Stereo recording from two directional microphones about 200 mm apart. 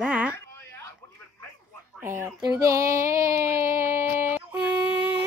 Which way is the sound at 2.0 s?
15° right (ahead or behind).